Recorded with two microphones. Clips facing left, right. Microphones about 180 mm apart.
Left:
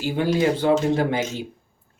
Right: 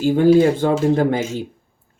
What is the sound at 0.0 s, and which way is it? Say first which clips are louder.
Speech: right 9 dB; 50° right (ahead or behind).